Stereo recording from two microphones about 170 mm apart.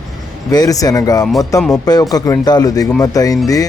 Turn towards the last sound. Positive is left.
turn(degrees=20)  # may be behind; listen again after turning